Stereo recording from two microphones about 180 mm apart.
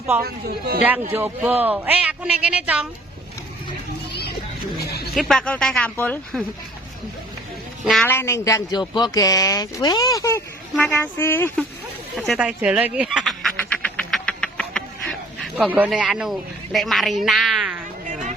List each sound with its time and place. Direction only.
0.2 s speech: 60° right (ahead or behind)
0.8 s a woman's voice: 10° right (ahead or behind)
4.8 s a sound: 60° left (ahead or behind)
5.1 s a man's voice: 5° left (ahead or behind)
8.0 s a man's voice: 15° left (ahead or behind)
12.1 s duck: centre (ahead or behind)
15.7 s speech: 10° right (ahead or behind)
18.0 s a sound: 45° right (ahead or behind)